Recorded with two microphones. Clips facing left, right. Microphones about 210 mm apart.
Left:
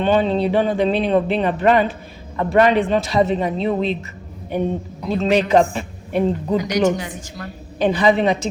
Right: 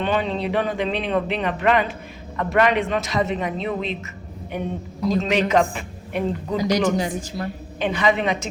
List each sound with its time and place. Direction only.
0.0 s speech: 35° left (ahead or behind)
6.6 s a woman's voice: 35° right (ahead or behind)
7.8 s speech: 35° left (ahead or behind)